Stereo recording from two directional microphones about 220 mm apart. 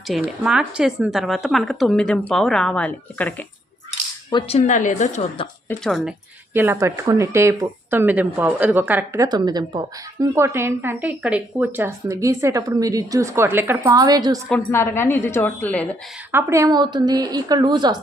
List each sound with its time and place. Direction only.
0.1 s a woman's voice: 5° right (ahead or behind)
4.3 s a woman's voice: 25° left (ahead or behind)
5.6 s speech: centre (ahead or behind); by 14.3 s 20° right (ahead or behind)
14.5 s a woman's voice: 10° left (ahead or behind)
16.3 s speech: 15° right (ahead or behind)